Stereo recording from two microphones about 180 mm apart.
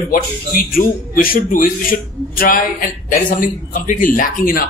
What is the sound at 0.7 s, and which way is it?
A man's voice, 55° left (ahead or behind).